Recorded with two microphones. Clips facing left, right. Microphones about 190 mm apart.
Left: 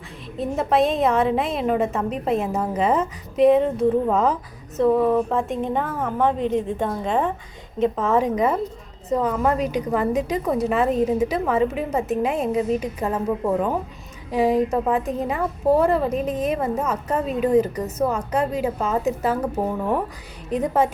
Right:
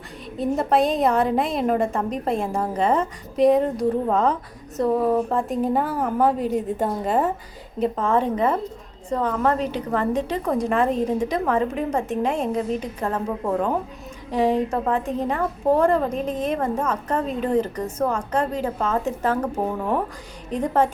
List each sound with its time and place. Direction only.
0.3 s a woman's voice: centre (ahead or behind)
3.3 s speech: 35° right (ahead or behind)
4.1 s a woman's voice: 5° left (ahead or behind)
20.5 s a woman's voice: 10° left (ahead or behind)